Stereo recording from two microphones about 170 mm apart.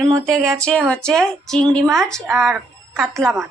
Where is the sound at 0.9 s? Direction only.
5° left (ahead or behind).